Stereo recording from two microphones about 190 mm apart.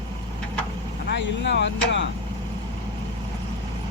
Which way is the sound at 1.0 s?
60° left (ahead or behind).